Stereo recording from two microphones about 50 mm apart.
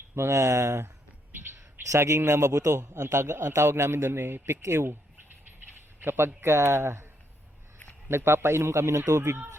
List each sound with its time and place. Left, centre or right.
0.3 s a man's voice: right
1.3 s a sound: right
1.5 s a man's voice: right
6.0 s a man's voice: right
8.1 s a man's voice: right